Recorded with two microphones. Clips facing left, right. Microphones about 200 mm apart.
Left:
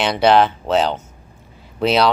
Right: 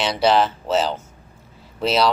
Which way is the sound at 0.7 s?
60° left (ahead or behind).